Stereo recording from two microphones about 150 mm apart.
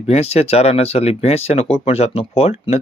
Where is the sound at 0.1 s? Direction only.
45° left (ahead or behind).